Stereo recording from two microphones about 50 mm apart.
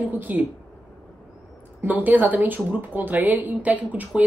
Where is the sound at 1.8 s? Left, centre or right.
Right.